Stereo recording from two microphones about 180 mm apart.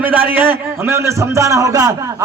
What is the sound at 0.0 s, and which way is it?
A man's voice, 10° right (ahead or behind).